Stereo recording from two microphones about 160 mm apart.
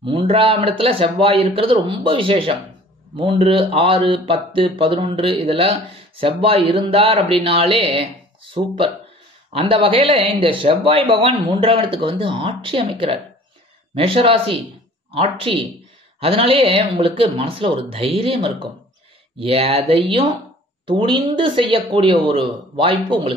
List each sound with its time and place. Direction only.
0.0 s speech: 30° right (ahead or behind)